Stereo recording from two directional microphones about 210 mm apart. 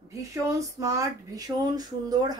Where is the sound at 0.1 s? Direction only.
15° right (ahead or behind).